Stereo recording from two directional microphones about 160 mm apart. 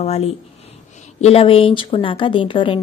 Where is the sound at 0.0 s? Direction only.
40° left (ahead or behind).